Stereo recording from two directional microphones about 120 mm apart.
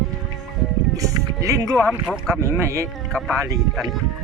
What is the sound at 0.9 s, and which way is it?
Music, 30° right (ahead or behind).